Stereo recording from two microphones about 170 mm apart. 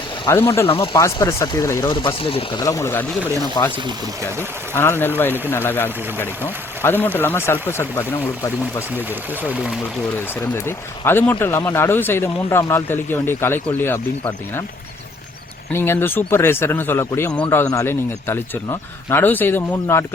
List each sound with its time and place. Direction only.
0.3 s speech: 15° left (ahead or behind)
4.7 s speech: 15° left (ahead or behind)
9.0 s speech: 10° right (ahead or behind)
10.4 s speech: 15° left (ahead or behind)
15.7 s speech: 15° left (ahead or behind)